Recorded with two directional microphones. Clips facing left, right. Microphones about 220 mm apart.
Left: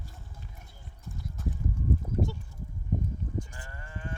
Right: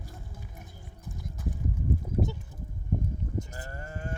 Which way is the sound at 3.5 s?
40° right (ahead or behind).